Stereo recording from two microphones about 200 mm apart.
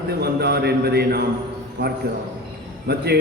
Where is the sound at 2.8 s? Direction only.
55° right (ahead or behind).